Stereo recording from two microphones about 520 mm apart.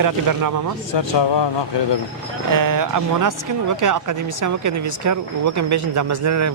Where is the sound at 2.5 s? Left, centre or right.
Right.